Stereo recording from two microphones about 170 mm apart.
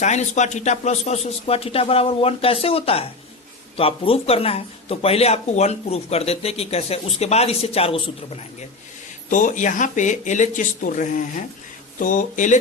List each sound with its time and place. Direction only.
0.0 s speech: 45° left (ahead or behind)
9.3 s speech: 50° left (ahead or behind)